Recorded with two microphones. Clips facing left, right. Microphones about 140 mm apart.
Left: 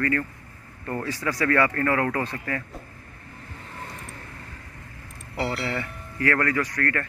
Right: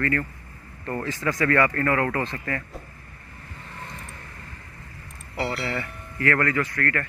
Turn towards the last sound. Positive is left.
turn(degrees=15)  # may be behind; listen again after turning